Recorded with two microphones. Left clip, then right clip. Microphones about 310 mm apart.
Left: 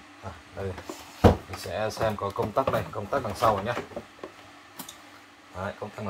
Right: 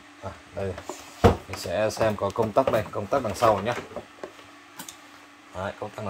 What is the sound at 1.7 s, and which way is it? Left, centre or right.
Speech, right.